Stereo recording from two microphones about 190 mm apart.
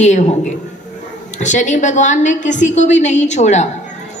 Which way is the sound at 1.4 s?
40° left (ahead or behind).